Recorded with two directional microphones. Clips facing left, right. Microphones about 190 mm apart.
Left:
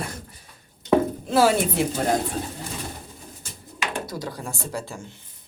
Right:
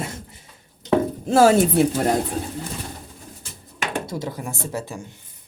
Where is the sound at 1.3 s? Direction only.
45° right (ahead or behind).